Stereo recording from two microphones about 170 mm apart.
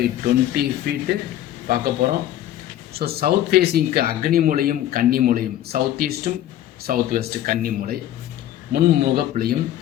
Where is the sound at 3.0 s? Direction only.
65° right (ahead or behind).